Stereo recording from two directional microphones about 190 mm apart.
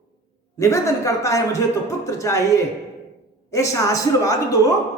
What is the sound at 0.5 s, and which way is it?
Speech, 15° left (ahead or behind).